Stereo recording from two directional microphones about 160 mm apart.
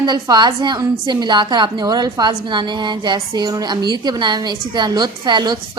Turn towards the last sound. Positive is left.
turn(degrees=-25)  # may be behind; listen again after turning